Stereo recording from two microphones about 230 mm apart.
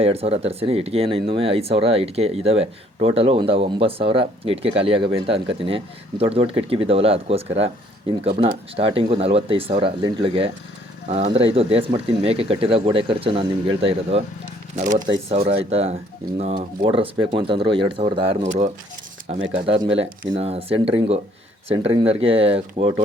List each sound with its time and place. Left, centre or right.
0.0 s speech: right
14.8 s speech: right
15.0 s speech: centre